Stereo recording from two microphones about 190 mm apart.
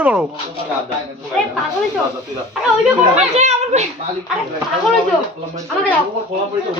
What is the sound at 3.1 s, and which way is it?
Speech, 35° right (ahead or behind).